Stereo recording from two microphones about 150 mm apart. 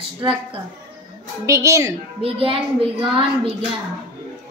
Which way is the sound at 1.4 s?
20° right (ahead or behind).